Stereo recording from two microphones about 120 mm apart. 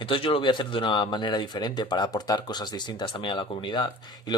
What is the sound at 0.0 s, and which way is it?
Speech, 45° left (ahead or behind).